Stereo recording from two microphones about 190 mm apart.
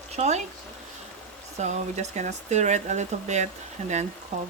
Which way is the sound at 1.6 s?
35° right (ahead or behind).